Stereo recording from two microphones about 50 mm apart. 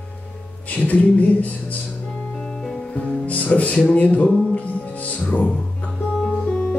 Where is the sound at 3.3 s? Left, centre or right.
Left.